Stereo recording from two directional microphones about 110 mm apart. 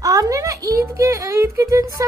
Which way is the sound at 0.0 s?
30° right (ahead or behind).